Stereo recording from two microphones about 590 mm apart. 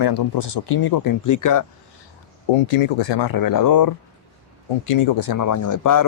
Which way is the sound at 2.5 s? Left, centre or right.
Left.